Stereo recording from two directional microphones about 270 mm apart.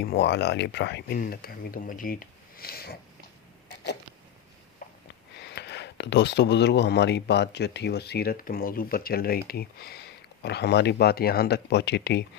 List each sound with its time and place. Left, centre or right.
0.0 s speech: left
4.8 s snort: left
5.4 s speech: left